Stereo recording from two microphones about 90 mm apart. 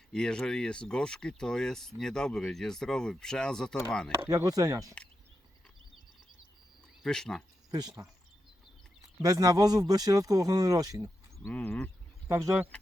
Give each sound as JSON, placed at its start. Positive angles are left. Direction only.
{"t": 0.1, "sound": "speech", "side_deg": 10}
{"t": 4.2, "sound": "speech", "side_deg": -30}
{"t": 4.4, "sound": "speech", "side_deg": -40}
{"t": 7.0, "sound": "speech", "side_deg": 5}
{"t": 7.7, "sound": "speech", "side_deg": -45}
{"t": 9.2, "sound": "speech", "side_deg": -45}
{"t": 11.5, "sound": "speech", "side_deg": 15}
{"t": 12.3, "sound": "speech", "side_deg": -30}